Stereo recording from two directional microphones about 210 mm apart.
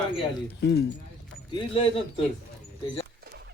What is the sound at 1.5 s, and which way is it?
Speech, 25° left (ahead or behind).